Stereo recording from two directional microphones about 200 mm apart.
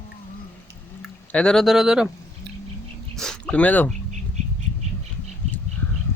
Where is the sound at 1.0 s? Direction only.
5° left (ahead or behind).